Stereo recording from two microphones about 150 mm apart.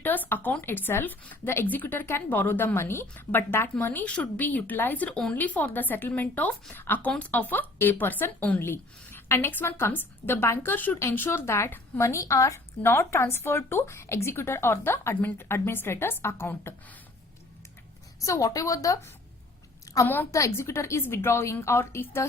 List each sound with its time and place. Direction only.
0.0 s speech: 10° left (ahead or behind)
18.2 s a woman's voice: 20° left (ahead or behind)